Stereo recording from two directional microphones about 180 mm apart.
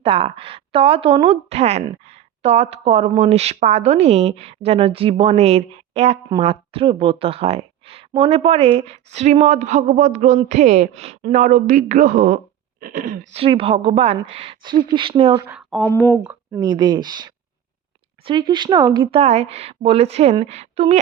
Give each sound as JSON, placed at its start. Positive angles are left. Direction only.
{"t": 0.0, "sound": "a woman's voice", "side_deg": -30}
{"t": 13.3, "sound": "a woman's voice", "side_deg": -30}
{"t": 15.5, "sound": "speech", "side_deg": 0}
{"t": 16.6, "sound": "a woman's voice", "side_deg": -25}